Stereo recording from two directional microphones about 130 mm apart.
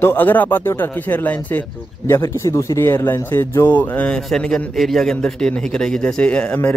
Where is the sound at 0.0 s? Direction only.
15° left (ahead or behind).